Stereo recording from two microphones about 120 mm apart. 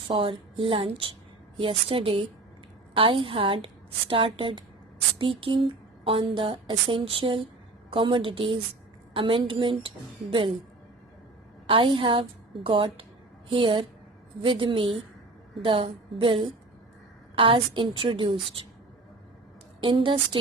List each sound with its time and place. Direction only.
0.2 s a woman's voice: 45° right (ahead or behind)
11.6 s a woman's voice: 45° right (ahead or behind)
19.8 s a woman's voice: 45° right (ahead or behind)